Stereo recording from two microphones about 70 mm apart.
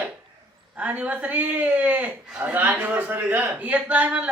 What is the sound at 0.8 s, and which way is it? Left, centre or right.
A man's voice, right.